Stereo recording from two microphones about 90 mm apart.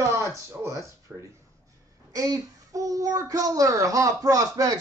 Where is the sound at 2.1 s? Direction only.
45° right (ahead or behind).